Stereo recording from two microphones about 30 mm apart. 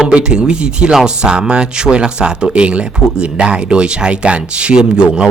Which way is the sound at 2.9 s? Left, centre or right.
Right.